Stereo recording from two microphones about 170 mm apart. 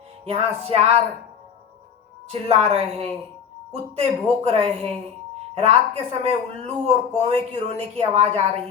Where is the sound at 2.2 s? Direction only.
35° right (ahead or behind).